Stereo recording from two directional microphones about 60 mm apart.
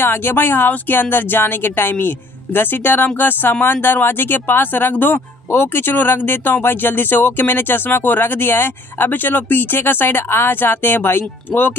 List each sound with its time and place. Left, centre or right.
0.0 s speech: left